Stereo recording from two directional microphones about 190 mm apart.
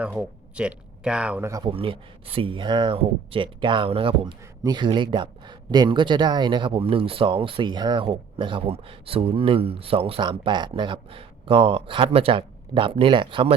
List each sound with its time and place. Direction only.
0.0 s speech: 5° right (ahead or behind)
1.7 s speech: 30° right (ahead or behind)